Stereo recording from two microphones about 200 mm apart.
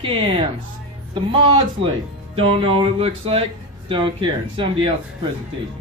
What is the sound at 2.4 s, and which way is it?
Speech, 25° right (ahead or behind).